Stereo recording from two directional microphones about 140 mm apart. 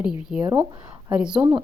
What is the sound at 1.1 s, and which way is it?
Speech, 5° right (ahead or behind).